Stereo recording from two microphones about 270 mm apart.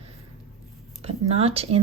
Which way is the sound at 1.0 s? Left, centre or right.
Right.